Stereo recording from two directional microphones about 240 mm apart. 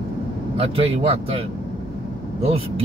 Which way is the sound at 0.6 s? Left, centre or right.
Right.